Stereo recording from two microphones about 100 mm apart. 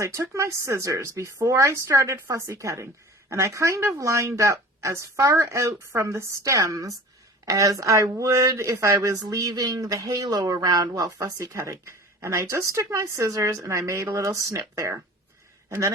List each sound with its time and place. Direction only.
0.0 s speech: 30° right (ahead or behind)
9.2 s speech: 40° right (ahead or behind)